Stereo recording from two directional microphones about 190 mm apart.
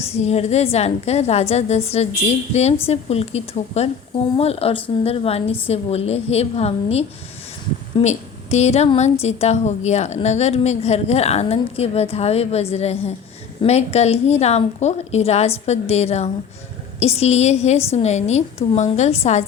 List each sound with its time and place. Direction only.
0.0 s a woman's voice: 35° left (ahead or behind)